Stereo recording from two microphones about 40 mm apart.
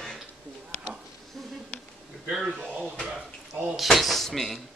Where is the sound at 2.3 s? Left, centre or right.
Centre.